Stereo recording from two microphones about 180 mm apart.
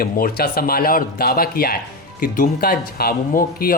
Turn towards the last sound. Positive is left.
turn(degrees=55)  # may be behind; listen again after turning